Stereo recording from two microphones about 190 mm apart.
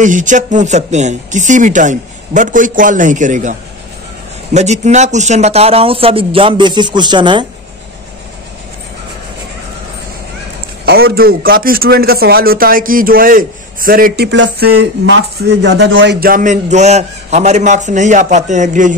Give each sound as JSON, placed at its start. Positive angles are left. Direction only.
{"t": 0.0, "sound": "speech", "side_deg": -40}
{"t": 4.6, "sound": "speech", "side_deg": -40}
{"t": 11.1, "sound": "a man's voice", "side_deg": -50}
{"t": 16.2, "sound": "speech", "side_deg": -45}